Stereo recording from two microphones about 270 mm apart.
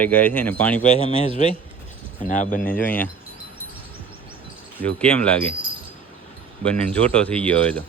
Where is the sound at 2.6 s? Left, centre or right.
Centre.